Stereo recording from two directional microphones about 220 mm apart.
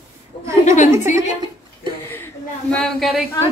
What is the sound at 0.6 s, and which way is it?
Speech, 35° left (ahead or behind).